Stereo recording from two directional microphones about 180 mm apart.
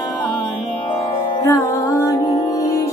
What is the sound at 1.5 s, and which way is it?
Music, 15° left (ahead or behind).